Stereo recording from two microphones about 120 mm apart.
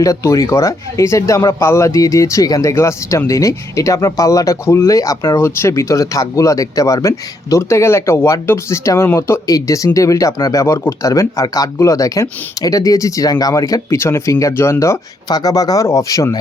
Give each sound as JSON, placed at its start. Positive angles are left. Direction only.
{"t": 0.0, "sound": "speech", "side_deg": 25}